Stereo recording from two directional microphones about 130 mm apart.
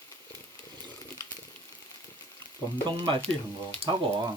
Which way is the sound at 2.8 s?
35° right (ahead or behind).